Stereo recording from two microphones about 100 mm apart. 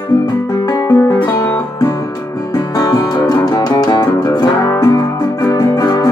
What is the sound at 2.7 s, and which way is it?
Music, 40° left (ahead or behind).